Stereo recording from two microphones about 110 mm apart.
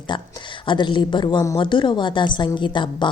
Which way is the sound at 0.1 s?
45° left (ahead or behind).